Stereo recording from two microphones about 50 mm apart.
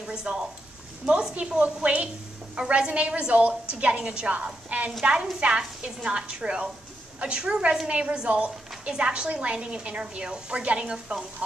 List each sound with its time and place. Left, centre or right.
0.0 s a woman's voice: centre